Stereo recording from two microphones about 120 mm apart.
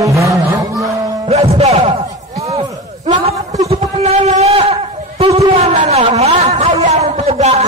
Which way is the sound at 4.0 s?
65° right (ahead or behind).